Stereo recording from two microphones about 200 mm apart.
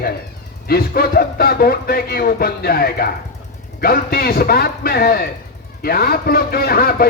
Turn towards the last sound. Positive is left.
turn(degrees=50)  # may be behind; listen again after turning